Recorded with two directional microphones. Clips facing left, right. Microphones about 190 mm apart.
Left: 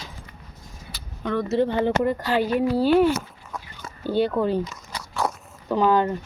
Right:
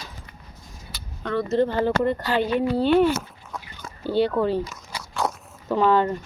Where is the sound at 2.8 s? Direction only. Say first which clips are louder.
Even; 5° left (ahead or behind).